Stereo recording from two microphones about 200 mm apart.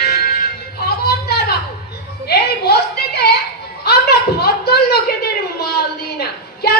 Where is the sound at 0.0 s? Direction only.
50° left (ahead or behind).